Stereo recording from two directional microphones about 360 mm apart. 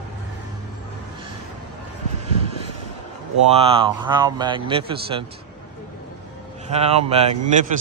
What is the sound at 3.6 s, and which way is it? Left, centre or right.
A man's voice, centre.